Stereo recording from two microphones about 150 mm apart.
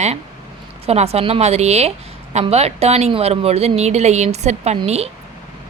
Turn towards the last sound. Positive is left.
turn(degrees=-50)  # may be behind; listen again after turning